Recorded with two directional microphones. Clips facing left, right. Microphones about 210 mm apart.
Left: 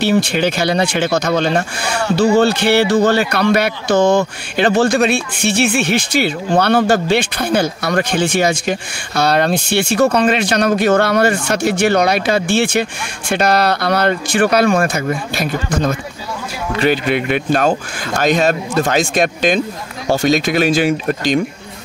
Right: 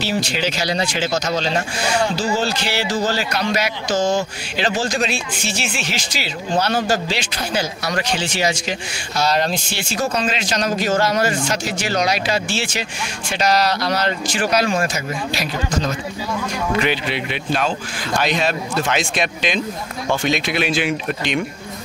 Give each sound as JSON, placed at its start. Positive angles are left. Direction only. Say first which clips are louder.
{"t": 0.0, "sound": "speech", "louder": "left 7 dB", "side_deg": 55}